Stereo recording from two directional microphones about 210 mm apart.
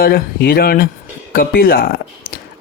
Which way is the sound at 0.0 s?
45° left (ahead or behind).